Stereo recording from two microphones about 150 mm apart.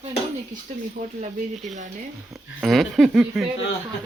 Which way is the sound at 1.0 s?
50° right (ahead or behind).